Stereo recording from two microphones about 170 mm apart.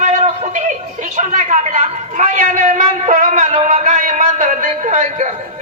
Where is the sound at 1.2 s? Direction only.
45° right (ahead or behind).